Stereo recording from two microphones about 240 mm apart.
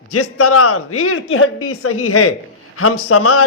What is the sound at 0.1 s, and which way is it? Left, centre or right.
A man's voice, left.